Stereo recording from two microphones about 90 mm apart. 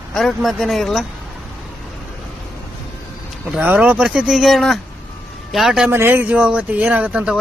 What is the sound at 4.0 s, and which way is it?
Speech, 5° right (ahead or behind).